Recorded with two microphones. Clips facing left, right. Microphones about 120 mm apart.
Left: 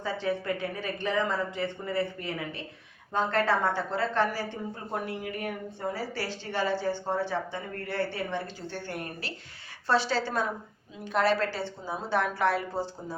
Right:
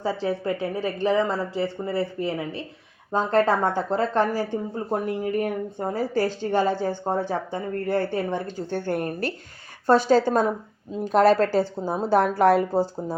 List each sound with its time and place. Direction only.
0.0 s a woman's voice: 35° right (ahead or behind)